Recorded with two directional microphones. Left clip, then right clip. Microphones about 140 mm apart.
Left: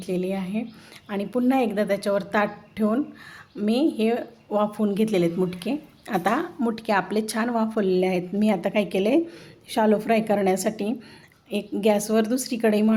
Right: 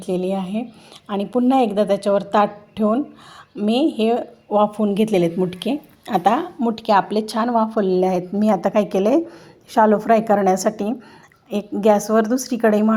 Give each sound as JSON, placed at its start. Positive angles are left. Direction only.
{"t": 0.0, "sound": "a woman's voice", "side_deg": -20}